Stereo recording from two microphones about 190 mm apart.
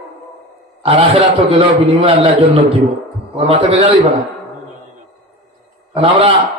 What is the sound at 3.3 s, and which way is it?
Speech, 30° right (ahead or behind).